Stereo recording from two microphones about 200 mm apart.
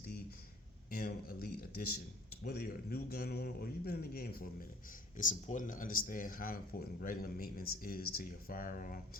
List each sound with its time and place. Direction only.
0.9 s a sound: 50° left (ahead or behind)
2.4 s speech: 50° left (ahead or behind)
5.1 s speech: 40° left (ahead or behind)